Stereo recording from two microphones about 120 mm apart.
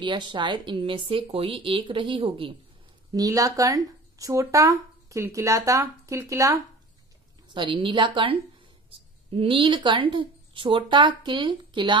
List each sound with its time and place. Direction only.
0.0 s speech: 40° right (ahead or behind)
3.1 s speech: 30° right (ahead or behind)
7.5 s a woman's voice: 45° right (ahead or behind)